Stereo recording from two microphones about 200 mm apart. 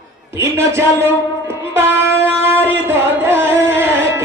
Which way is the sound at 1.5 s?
10° right (ahead or behind).